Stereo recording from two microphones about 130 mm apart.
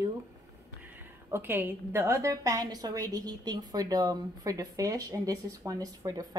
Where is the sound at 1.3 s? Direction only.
15° right (ahead or behind).